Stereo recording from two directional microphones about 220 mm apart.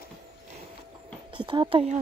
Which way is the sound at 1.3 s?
20° right (ahead or behind).